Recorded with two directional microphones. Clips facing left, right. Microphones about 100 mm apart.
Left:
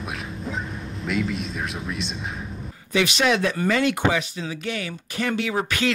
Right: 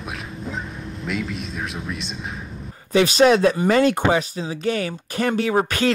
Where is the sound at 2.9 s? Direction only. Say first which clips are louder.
Right 6 dB; 35° right (ahead or behind).